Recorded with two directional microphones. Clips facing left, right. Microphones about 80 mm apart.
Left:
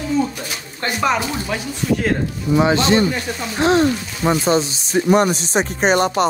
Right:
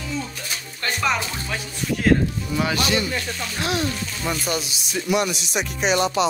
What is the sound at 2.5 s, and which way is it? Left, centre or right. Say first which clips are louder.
Speech: left 9 dB; left.